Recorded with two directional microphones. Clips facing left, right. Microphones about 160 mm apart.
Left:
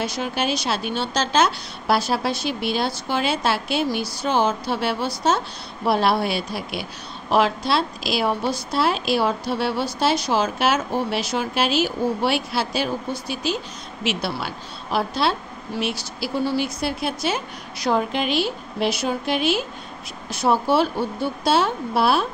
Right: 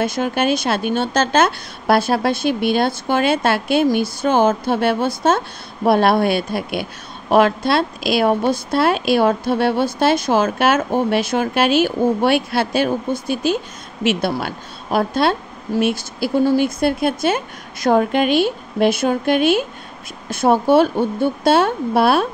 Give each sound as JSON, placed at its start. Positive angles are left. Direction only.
{"t": 0.0, "sound": "a woman's voice", "side_deg": -50}